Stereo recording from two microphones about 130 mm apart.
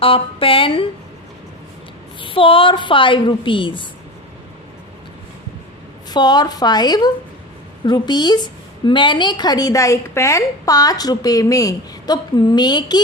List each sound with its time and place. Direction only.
0.0 s speech: 45° left (ahead or behind)
2.2 s a woman's voice: 45° left (ahead or behind)
6.1 s a woman's voice: 30° left (ahead or behind)